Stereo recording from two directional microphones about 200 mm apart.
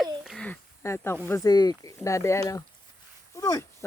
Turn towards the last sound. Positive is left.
turn(degrees=15)  # may be behind; listen again after turning